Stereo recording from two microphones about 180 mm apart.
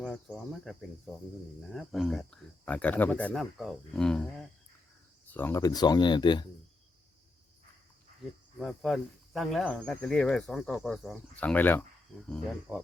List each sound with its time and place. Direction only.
0.0 s speech: 5° right (ahead or behind); by 6.4 s 25° left (ahead or behind)
8.5 s speech: centre (ahead or behind)